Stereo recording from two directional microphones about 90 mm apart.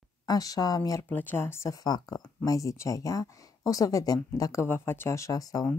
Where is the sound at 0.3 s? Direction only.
45° left (ahead or behind).